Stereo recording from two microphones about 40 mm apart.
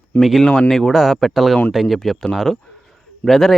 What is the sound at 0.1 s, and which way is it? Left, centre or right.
Speech, left.